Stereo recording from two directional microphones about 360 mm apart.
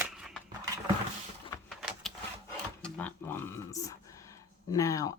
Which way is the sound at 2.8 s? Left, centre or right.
Centre.